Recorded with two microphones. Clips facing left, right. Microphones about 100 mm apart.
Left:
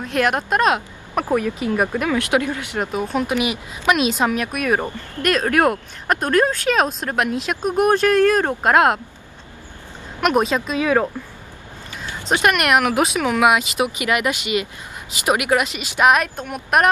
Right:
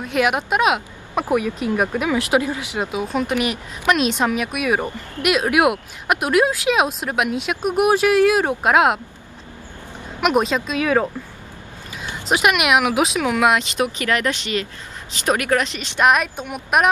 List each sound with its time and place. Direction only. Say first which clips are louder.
0.0 s speech: even; 5° right (ahead or behind)
2.3 s speech: right 2 dB; 15° right (ahead or behind)
2.7 s speech: left 2 dB; 5° right (ahead or behind)
10.2 s speech: even; centre (ahead or behind)
12.3 s speech: even; 5° right (ahead or behind)